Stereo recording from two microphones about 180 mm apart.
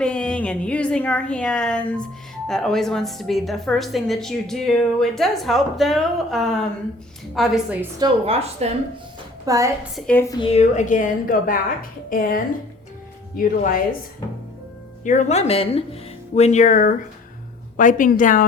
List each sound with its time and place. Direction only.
0.0 s a woman's voice: 5° left (ahead or behind)
8.3 s a woman's voice: 35° right (ahead or behind)
9.5 s a woman's voice: 20° right (ahead or behind)
9.9 s a woman's voice: 5° left (ahead or behind)
10.4 s a woman's voice: 35° left (ahead or behind)
15.0 s a woman's voice: 40° left (ahead or behind)